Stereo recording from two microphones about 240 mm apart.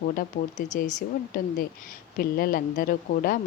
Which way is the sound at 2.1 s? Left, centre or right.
Left.